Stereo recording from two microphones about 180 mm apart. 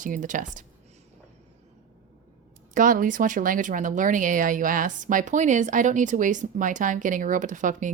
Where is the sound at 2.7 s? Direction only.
50° right (ahead or behind).